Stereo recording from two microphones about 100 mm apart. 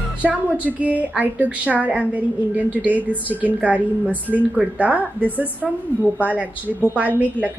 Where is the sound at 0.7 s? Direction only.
15° right (ahead or behind).